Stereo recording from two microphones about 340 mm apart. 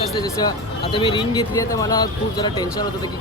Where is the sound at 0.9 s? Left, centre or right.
Centre.